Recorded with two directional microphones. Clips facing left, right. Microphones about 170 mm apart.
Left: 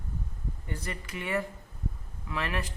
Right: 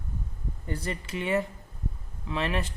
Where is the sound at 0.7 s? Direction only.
30° right (ahead or behind).